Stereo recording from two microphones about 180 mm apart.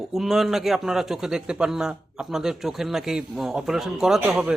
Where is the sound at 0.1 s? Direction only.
Centre (ahead or behind).